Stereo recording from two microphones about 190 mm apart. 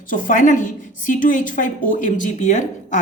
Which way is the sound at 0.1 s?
45° left (ahead or behind).